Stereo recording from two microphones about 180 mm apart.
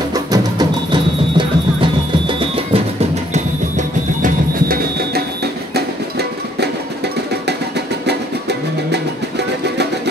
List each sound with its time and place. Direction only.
0.1 s music: 20° right (ahead or behind)
3.7 s music: 50° right (ahead or behind)
5.8 s music: 65° right (ahead or behind)
8.1 s music: 70° right (ahead or behind)